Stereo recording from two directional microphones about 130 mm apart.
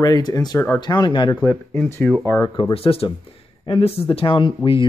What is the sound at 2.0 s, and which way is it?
Speech, 10° left (ahead or behind).